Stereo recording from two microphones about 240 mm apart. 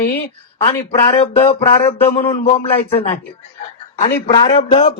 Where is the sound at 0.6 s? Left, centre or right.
Left.